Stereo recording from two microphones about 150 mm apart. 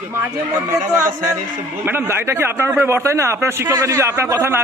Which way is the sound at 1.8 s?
15° right (ahead or behind).